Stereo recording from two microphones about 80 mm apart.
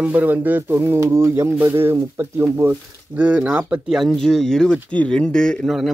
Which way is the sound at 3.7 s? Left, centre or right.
Centre.